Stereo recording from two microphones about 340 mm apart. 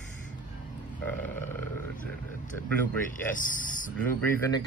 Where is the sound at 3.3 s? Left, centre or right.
Left.